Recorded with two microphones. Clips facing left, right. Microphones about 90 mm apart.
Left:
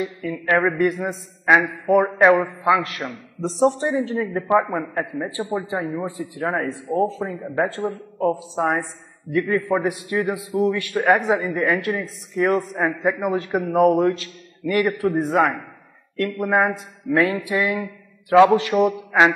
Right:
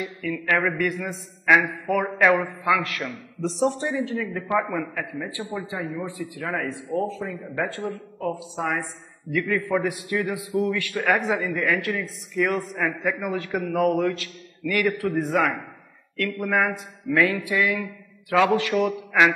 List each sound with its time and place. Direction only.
0.0 s a man's voice: 30° left (ahead or behind)
3.4 s a man's voice: 35° left (ahead or behind)